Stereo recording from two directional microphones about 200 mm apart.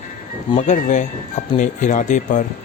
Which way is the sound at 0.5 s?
40° left (ahead or behind).